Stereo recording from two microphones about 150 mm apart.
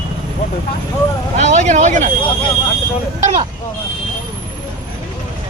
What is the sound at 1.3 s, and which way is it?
Speech, 50° right (ahead or behind).